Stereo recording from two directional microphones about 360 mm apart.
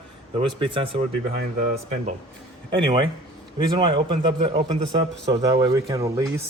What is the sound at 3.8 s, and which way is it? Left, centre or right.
Speech, centre.